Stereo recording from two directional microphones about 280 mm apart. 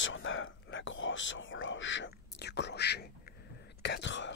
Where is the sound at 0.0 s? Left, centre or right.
Left.